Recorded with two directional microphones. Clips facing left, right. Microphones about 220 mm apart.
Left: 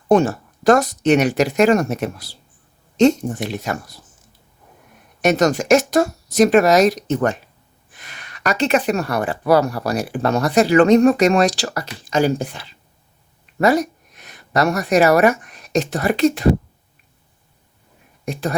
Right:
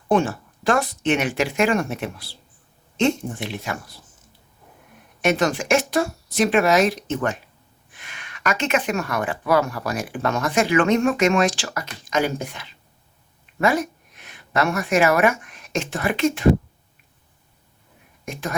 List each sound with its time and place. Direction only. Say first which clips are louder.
0.1 s speech: left 5 dB; 40° left (ahead or behind)
5.2 s speech: left 4 dB; 40° left (ahead or behind)
18.3 s speech: left 6 dB; 35° left (ahead or behind)